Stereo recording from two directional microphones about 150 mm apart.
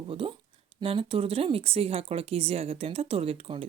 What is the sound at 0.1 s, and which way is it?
Speech, 35° right (ahead or behind).